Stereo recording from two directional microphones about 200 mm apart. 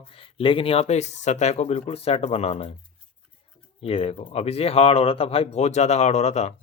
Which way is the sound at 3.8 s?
30° left (ahead or behind).